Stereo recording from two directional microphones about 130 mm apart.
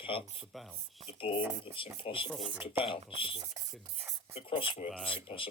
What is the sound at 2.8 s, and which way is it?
Speech, 45° left (ahead or behind).